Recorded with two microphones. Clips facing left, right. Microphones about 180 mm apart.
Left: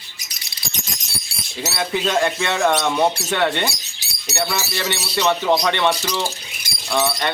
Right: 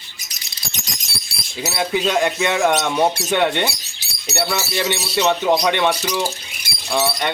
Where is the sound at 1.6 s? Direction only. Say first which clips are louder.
Right 2 dB; 15° right (ahead or behind).